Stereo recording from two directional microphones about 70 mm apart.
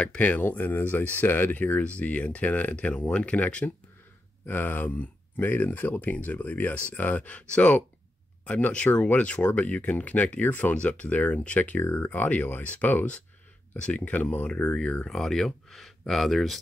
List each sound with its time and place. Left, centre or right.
0.0 s speech: centre
15.0 s speech: centre